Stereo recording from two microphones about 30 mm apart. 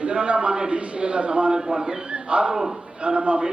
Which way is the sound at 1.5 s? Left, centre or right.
Right.